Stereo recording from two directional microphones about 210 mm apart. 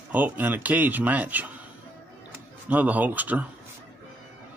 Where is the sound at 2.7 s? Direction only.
5° right (ahead or behind).